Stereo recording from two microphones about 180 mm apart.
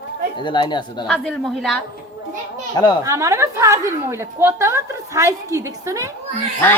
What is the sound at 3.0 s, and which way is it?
A woman's voice, 15° right (ahead or behind).